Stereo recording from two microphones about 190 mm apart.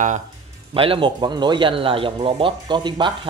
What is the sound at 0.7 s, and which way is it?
A man's voice, 30° right (ahead or behind).